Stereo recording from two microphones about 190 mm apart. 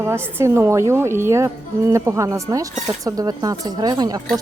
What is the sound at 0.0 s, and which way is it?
A woman's voice, 15° right (ahead or behind).